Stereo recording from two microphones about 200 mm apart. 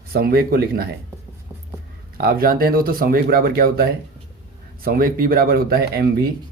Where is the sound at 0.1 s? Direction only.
50° right (ahead or behind).